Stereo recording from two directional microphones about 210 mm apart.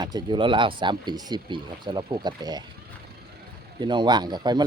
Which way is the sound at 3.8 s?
20° right (ahead or behind).